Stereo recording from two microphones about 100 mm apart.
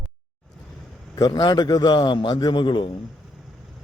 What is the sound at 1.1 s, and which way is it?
A man's voice, 40° left (ahead or behind).